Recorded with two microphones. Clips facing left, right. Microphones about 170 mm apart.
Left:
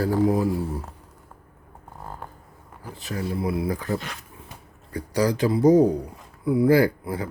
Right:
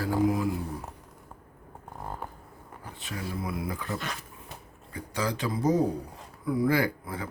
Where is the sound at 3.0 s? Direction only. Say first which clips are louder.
Left 8 dB; 35° left (ahead or behind).